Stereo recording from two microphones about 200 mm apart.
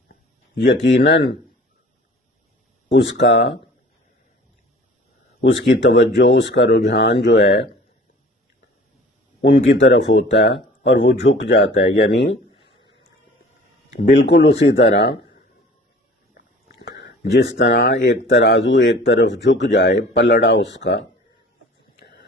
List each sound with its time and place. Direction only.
0.5 s speech: 60° left (ahead or behind)
2.9 s speech: 60° left (ahead or behind)
5.4 s speech: 65° left (ahead or behind)
9.5 s speech: 65° left (ahead or behind)
12.6 s a sound: 65° left (ahead or behind)
14.1 s speech: 60° left (ahead or behind)
16.3 s speech: 55° left (ahead or behind)
21.9 s a sound: 55° left (ahead or behind)